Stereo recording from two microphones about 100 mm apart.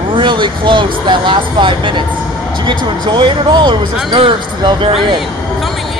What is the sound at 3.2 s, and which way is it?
Speech, 50° right (ahead or behind).